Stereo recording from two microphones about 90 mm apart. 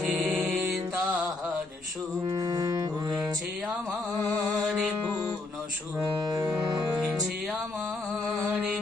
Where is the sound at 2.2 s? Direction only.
40° right (ahead or behind).